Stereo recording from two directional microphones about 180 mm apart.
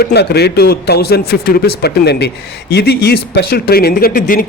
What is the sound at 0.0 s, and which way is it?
A man's voice, 65° left (ahead or behind).